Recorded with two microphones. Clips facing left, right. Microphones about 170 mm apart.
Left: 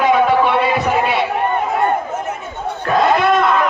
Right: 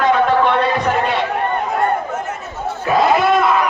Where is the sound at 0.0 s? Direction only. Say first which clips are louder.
Left 1 dB; 10° left (ahead or behind).